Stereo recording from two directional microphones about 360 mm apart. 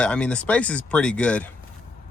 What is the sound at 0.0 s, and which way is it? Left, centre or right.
Speech, centre.